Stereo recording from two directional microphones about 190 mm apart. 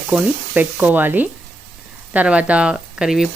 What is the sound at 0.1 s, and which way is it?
Sizzle, 10° right (ahead or behind).